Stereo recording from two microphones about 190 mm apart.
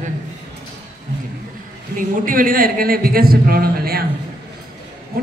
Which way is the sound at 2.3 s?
45° right (ahead or behind).